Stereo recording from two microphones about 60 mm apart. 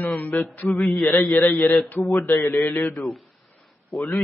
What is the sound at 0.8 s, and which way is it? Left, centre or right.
A man's voice, centre.